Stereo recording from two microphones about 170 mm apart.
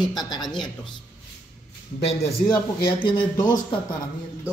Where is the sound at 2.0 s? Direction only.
35° left (ahead or behind).